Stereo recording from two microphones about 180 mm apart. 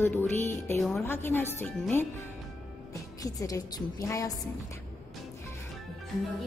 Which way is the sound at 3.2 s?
20° left (ahead or behind).